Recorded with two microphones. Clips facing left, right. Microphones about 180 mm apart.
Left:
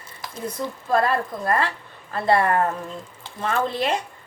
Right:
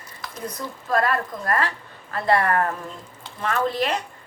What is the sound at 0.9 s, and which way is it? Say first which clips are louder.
A woman's voice: left 1 dB; 25° left (ahead or behind).